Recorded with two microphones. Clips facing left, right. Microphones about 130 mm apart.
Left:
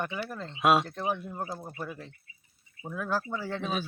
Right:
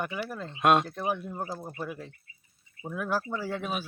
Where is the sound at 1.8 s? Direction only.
15° right (ahead or behind).